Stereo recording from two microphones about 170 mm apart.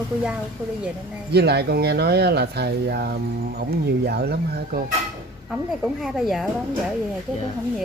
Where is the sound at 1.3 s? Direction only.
75° right (ahead or behind).